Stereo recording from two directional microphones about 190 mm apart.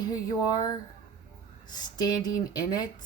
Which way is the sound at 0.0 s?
20° left (ahead or behind).